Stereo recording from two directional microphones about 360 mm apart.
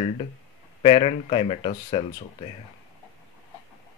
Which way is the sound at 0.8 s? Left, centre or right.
Centre.